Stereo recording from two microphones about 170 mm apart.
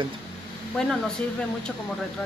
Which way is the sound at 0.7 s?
5° left (ahead or behind).